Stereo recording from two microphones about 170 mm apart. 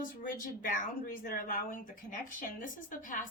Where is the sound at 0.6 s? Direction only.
55° left (ahead or behind).